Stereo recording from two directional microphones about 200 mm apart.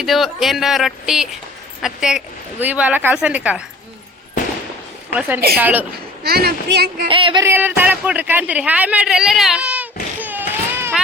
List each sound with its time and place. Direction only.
0.0 s speech: centre (ahead or behind)
5.5 s speech: 10° right (ahead or behind)
6.2 s speech: 50° right (ahead or behind)
7.1 s speech: 25° right (ahead or behind)
7.4 s speech: 10° right (ahead or behind)